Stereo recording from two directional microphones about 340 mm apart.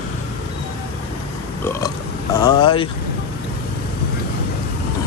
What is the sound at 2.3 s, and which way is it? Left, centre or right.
Speech, centre.